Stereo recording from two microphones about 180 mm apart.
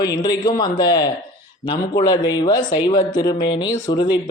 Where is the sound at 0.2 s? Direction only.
20° left (ahead or behind).